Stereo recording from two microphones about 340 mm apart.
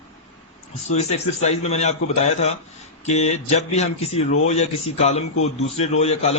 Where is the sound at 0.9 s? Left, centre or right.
Centre.